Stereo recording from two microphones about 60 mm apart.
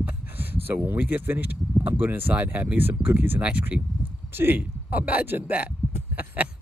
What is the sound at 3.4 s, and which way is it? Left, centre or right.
Speech, right.